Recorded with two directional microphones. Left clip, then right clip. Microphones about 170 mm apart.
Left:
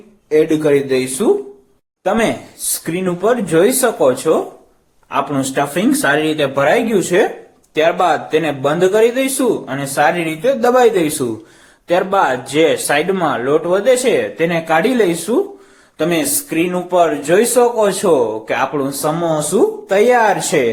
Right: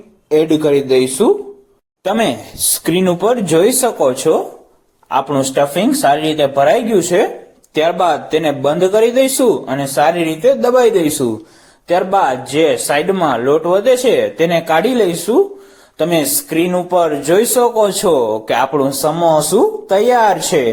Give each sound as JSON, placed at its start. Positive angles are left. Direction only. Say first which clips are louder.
{"t": 0.3, "sound": "speech", "louder": "right 1 dB", "side_deg": -20}
{"t": 2.0, "sound": "speech", "louder": "even", "side_deg": -40}